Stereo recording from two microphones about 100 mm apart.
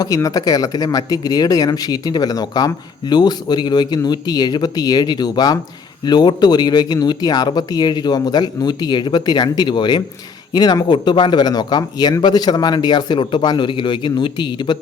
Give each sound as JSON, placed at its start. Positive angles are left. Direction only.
{"t": 0.0, "sound": "speech", "side_deg": 35}